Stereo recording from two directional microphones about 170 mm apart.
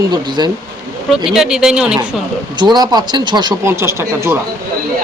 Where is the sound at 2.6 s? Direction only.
25° right (ahead or behind).